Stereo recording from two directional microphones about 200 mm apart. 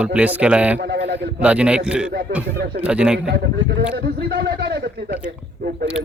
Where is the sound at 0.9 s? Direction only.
55° right (ahead or behind).